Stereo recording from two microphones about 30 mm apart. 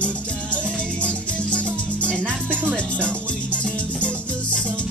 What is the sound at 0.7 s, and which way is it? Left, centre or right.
Music, left.